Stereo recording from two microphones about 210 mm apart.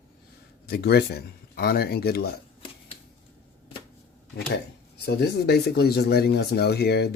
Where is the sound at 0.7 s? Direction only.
50° left (ahead or behind).